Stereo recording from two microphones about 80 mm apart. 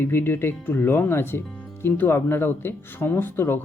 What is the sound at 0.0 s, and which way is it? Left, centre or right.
Speech, left.